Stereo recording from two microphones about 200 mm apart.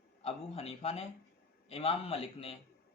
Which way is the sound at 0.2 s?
30° left (ahead or behind).